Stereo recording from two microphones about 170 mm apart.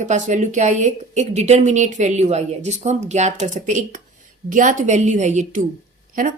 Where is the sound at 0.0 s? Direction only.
45° right (ahead or behind).